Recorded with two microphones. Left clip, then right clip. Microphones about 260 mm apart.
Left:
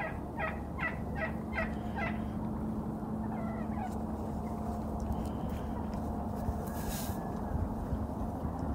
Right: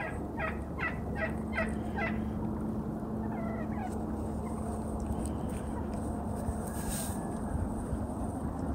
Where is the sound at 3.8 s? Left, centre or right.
Left.